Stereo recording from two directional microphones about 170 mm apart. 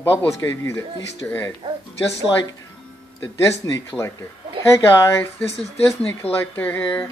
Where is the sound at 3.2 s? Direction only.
15° left (ahead or behind).